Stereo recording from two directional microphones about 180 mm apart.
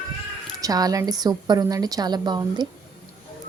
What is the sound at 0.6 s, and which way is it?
A woman's voice, 20° right (ahead or behind).